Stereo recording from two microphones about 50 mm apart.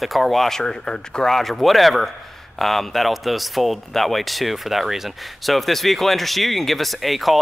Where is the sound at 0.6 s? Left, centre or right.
Centre.